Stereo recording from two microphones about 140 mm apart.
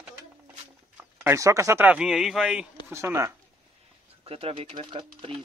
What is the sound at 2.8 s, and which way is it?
Speech, 15° right (ahead or behind).